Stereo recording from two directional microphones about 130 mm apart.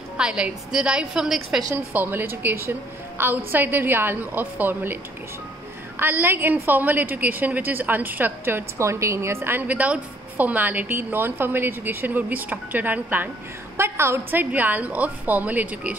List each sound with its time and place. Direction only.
0.2 s a woman's voice: 5° right (ahead or behind)
1.6 s a woman's voice: 25° right (ahead or behind)
2.0 s a woman's voice: 15° right (ahead or behind)
5.9 s a woman's voice: 15° right (ahead or behind)